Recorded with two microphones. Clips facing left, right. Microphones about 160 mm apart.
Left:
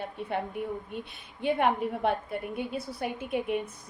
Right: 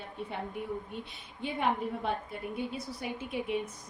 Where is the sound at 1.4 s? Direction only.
60° left (ahead or behind).